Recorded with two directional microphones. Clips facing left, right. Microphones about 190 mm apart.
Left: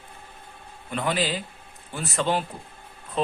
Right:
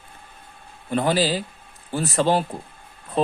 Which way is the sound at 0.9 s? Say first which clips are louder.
Right 5 dB; 35° right (ahead or behind).